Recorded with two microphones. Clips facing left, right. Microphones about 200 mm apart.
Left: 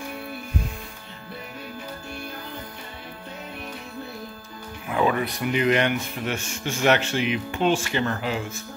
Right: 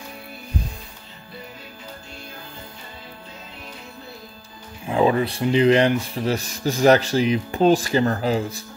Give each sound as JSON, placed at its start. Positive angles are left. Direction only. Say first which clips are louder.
{"t": 4.8, "sound": "speech", "louder": "right 4 dB", "side_deg": -30}